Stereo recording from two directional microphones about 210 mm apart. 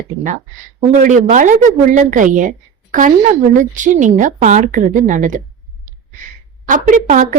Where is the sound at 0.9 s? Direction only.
35° right (ahead or behind).